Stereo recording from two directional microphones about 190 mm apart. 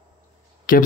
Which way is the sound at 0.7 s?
45° left (ahead or behind).